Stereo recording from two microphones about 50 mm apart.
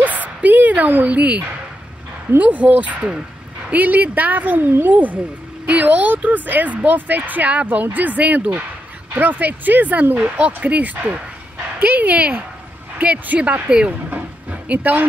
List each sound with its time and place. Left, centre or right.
0.0 s bow-wow: right
2.3 s a woman's voice: right
4.9 s a woman's voice: right
13.7 s speech: centre
14.1 s a sound: right